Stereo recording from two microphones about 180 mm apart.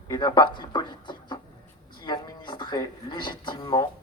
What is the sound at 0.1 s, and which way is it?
Speech, 25° left (ahead or behind).